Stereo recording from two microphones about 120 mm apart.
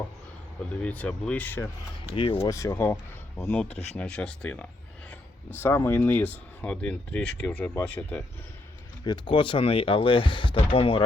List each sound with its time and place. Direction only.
0.6 s speech: 10° left (ahead or behind)
2.1 s speech: 50° left (ahead or behind)
2.5 s speech: 25° left (ahead or behind)
9.0 s speech: 45° left (ahead or behind)